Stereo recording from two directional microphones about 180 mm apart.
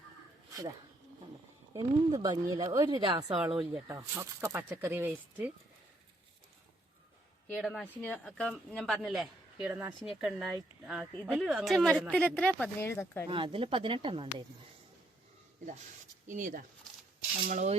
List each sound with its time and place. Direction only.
1.7 s speech: 20° right (ahead or behind)
3.8 s speech: 15° right (ahead or behind)
7.4 s speech: 5° left (ahead or behind)
13.2 s speech: 30° right (ahead or behind)
16.2 s speech: 45° right (ahead or behind)